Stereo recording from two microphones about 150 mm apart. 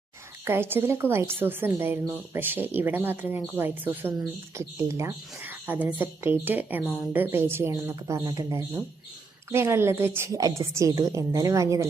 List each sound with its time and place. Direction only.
0.4 s a woman's voice: 15° right (ahead or behind)
6.8 s a woman's voice: centre (ahead or behind)
7.1 s a woman's voice: 15° right (ahead or behind)